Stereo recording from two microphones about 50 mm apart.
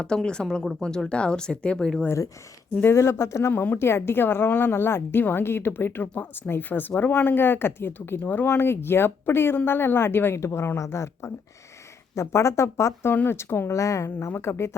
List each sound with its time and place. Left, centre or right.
0.0 s speech: centre
2.9 s speech: left
3.5 s speech: left
3.8 s a woman's voice: left
8.4 s a woman's voice: left
10.3 s speech: left
13.2 s a woman's voice: left
13.7 s speech: left
14.3 s a woman's voice: left